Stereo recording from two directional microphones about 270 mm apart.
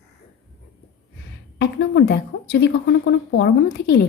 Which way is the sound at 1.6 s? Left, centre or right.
Left.